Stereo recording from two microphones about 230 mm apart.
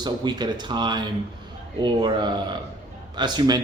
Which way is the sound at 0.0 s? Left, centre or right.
Centre.